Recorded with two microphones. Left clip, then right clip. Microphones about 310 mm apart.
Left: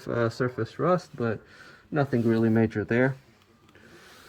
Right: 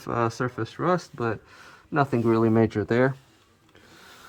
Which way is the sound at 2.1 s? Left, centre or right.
Right.